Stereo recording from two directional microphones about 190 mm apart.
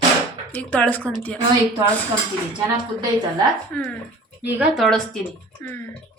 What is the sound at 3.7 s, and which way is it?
A woman's voice, 5° left (ahead or behind).